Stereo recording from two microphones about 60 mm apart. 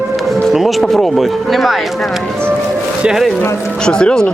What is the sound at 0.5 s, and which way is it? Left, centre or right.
Speech, centre.